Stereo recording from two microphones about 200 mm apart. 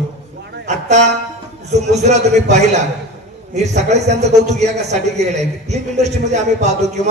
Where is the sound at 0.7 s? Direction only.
35° right (ahead or behind).